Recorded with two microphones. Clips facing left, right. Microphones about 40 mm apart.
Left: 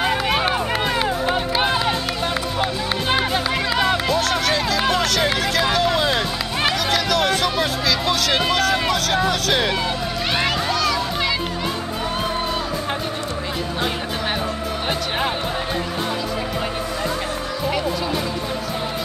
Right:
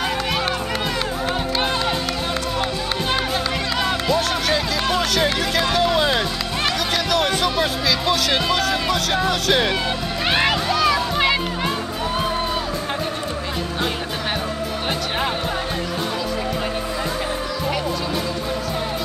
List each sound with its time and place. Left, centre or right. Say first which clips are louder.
0.0 s music: left 3 dB; centre
3.7 s run: left 4 dB; centre
4.1 s music: even; centre
8.9 s speech: left 1 dB; centre
10.3 s music: right 2 dB; centre